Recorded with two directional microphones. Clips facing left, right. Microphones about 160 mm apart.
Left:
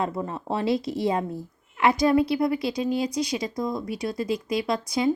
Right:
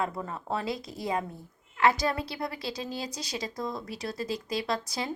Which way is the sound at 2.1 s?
15° left (ahead or behind).